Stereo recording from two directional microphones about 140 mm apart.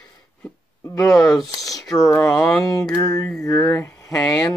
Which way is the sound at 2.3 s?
5° left (ahead or behind).